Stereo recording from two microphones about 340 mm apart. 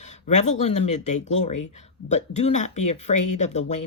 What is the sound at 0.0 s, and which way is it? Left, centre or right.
Speech, left.